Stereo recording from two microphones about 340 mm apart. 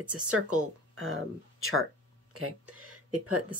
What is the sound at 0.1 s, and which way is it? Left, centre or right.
Speech, right.